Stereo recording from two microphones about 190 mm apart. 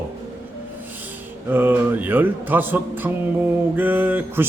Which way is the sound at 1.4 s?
10° right (ahead or behind).